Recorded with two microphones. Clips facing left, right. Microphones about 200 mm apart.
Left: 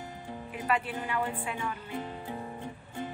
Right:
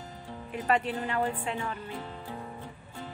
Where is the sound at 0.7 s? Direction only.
40° right (ahead or behind).